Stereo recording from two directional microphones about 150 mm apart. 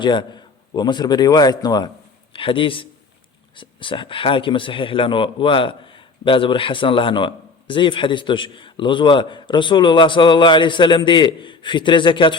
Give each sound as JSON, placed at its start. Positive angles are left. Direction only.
{"t": 0.0, "sound": "a man's voice", "side_deg": 30}